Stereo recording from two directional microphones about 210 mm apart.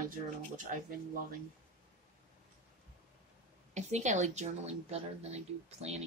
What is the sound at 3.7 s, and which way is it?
A woman's voice, 35° right (ahead or behind).